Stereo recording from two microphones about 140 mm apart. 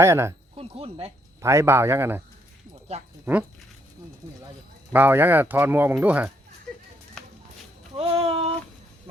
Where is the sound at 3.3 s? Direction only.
10° right (ahead or behind).